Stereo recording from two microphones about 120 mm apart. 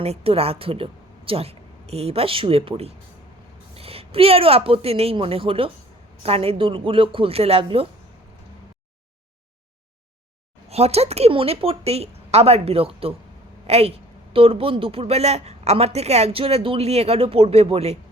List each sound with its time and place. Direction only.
0.0 s a woman's voice: 55° right (ahead or behind)
10.7 s speech: 60° right (ahead or behind)